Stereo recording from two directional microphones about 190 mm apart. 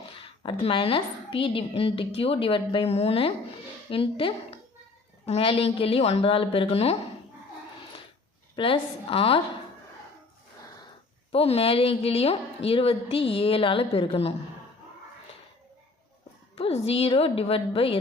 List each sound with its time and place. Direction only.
0.0 s a woman's voice: 25° left (ahead or behind)
8.5 s a woman's voice: 30° left (ahead or behind)
11.3 s a woman's voice: 30° left (ahead or behind)
16.6 s a woman's voice: 30° left (ahead or behind)